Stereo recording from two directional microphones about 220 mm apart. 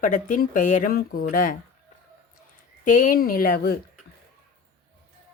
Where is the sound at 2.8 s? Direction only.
40° left (ahead or behind).